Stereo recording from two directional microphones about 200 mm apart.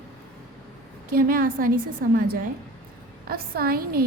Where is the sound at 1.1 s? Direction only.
45° right (ahead or behind).